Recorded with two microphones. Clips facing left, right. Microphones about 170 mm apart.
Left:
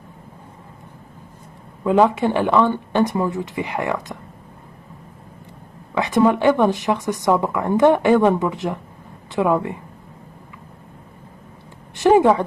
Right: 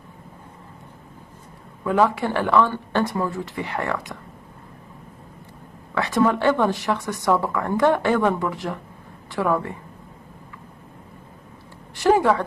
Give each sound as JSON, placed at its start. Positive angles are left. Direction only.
{"t": 1.9, "sound": "speech", "side_deg": 20}
{"t": 5.9, "sound": "a woman's voice", "side_deg": 20}
{"t": 12.0, "sound": "speech", "side_deg": 20}